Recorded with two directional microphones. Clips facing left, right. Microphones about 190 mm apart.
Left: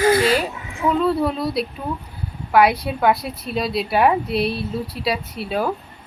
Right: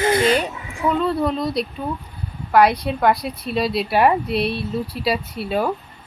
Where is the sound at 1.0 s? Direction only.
5° left (ahead or behind).